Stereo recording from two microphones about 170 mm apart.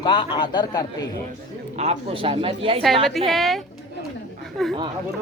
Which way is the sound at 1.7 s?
40° right (ahead or behind).